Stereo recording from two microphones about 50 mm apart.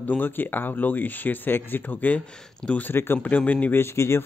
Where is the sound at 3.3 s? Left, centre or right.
Left.